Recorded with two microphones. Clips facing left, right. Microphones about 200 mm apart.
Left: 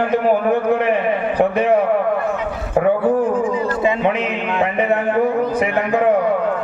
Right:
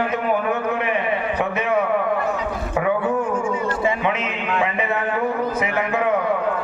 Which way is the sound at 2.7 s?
40° left (ahead or behind).